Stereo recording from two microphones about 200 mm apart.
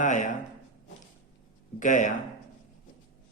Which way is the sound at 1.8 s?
40° left (ahead or behind).